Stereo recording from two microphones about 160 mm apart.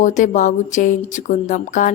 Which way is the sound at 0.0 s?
50° left (ahead or behind).